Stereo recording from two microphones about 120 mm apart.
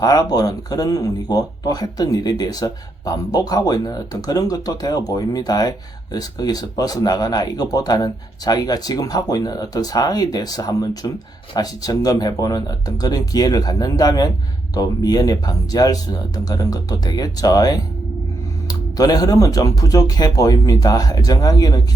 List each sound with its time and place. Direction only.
0.0 s speech: 30° left (ahead or behind)